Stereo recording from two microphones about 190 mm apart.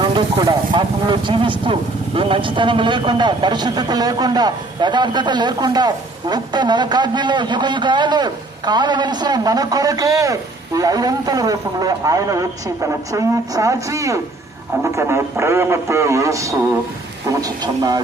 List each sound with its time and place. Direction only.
0.0 s speech: 25° right (ahead or behind)